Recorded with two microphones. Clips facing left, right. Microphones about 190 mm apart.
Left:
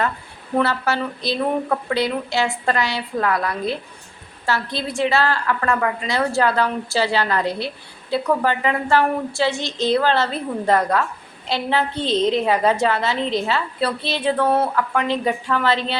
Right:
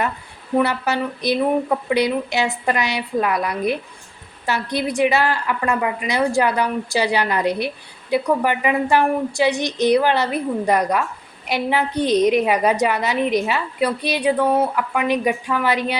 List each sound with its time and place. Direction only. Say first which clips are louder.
0.5 s a woman's voice: right 1 dB; 15° right (ahead or behind)